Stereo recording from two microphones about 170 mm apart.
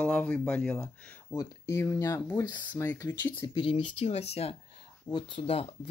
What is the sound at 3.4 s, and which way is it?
Speech, 25° left (ahead or behind).